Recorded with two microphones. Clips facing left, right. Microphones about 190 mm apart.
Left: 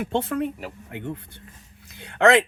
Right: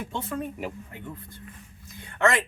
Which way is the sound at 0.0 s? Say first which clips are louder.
Left 7 dB; 70° left (ahead or behind).